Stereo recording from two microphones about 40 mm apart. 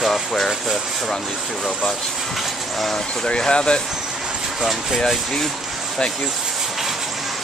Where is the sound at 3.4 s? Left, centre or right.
Left.